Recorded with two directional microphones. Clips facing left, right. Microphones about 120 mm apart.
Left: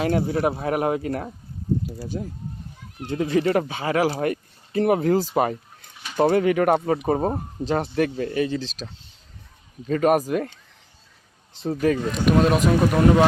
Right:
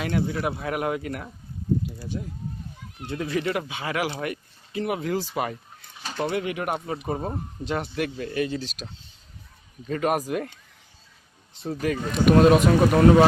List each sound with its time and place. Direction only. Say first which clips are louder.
0.0 s speech: left 5 dB; 35° left (ahead or behind)
9.9 s speech: left 5 dB; 40° left (ahead or behind)
11.7 s speech: left 5 dB; 40° left (ahead or behind)
12.1 s speech: right 7 dB; centre (ahead or behind)